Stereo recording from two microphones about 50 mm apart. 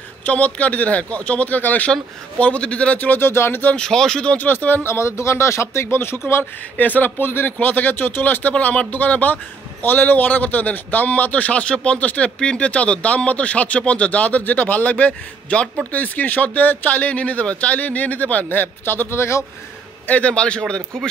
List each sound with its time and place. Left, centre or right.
0.2 s speech: left
3.2 s a man's voice: left
3.7 s speech: centre
4.4 s speech: left
4.8 s speech: left
6.8 s a man's voice: left
18.5 s a man's voice: left
20.1 s speech: left